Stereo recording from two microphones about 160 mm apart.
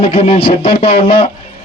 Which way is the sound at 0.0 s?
35° left (ahead or behind).